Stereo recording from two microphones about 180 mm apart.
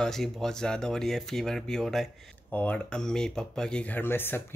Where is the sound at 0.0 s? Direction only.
Centre (ahead or behind).